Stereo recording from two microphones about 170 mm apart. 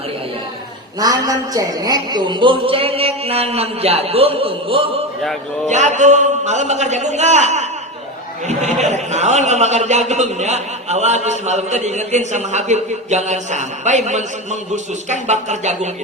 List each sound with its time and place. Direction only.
0.9 s a man's voice: 20° right (ahead or behind)
5.6 s a man's voice: 45° right (ahead or behind)